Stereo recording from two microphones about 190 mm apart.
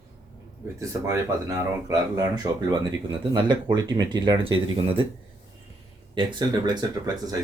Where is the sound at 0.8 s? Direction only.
15° right (ahead or behind).